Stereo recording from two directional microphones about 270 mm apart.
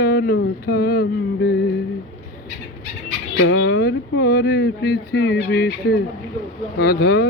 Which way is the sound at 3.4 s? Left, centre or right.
Left.